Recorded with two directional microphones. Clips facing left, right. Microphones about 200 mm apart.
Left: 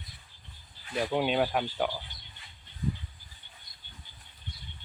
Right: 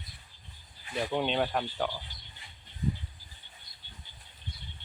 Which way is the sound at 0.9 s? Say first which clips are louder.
Left 2 dB; 5° left (ahead or behind).